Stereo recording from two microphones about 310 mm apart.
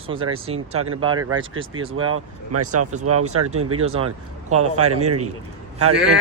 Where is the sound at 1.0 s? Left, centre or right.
Centre.